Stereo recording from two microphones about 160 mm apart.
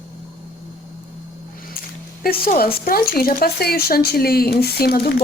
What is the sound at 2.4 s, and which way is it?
Speech, 65° left (ahead or behind).